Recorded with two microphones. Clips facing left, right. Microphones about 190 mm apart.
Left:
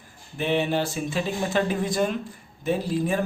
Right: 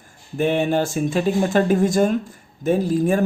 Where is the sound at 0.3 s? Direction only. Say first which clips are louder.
Right 5 dB; 45° right (ahead or behind).